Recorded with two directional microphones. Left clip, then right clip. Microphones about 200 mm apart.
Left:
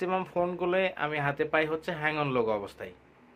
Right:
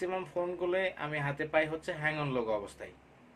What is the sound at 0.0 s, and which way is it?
Speech, 45° left (ahead or behind).